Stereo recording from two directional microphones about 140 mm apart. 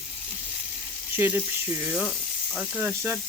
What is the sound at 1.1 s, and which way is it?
Speech, 15° right (ahead or behind).